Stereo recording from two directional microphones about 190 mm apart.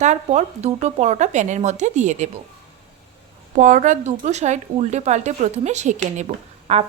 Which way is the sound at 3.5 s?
40° right (ahead or behind).